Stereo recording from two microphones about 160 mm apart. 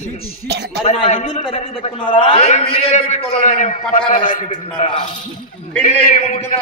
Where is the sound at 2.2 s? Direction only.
35° left (ahead or behind); by 6.2 s 55° left (ahead or behind).